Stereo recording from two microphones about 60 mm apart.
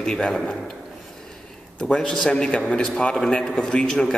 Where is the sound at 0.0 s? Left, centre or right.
Centre.